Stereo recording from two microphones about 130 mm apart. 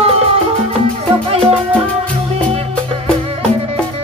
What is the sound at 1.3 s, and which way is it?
Music, 50° right (ahead or behind).